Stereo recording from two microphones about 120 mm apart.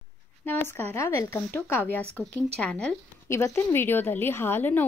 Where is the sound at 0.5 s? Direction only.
20° left (ahead or behind).